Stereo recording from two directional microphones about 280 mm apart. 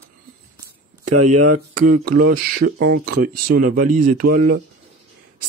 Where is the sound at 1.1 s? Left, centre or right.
Right.